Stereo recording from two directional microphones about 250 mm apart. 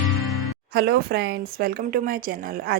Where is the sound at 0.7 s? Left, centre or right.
Right.